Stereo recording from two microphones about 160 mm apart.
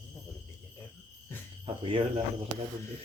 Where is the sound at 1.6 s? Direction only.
35° right (ahead or behind).